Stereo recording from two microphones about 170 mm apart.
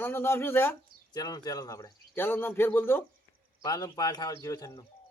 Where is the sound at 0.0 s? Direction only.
15° left (ahead or behind).